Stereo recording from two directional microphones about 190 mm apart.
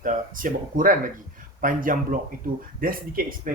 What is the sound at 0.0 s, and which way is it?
Speech, 45° right (ahead or behind).